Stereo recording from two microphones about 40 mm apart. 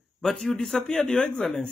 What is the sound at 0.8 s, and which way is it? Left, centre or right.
Speech, centre.